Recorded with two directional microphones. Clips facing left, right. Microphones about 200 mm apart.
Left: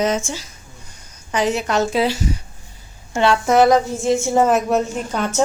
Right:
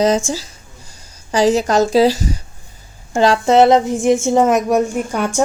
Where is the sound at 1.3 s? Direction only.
35° right (ahead or behind).